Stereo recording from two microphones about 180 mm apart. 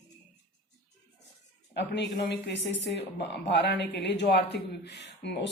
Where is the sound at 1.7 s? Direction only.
70° left (ahead or behind).